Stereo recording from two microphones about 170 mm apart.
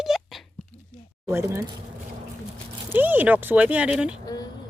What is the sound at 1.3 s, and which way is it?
Speech, 15° right (ahead or behind).